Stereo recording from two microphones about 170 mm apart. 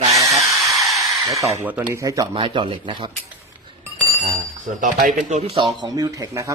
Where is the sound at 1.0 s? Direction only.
20° right (ahead or behind).